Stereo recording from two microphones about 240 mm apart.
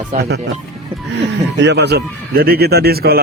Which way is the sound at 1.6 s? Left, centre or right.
Right.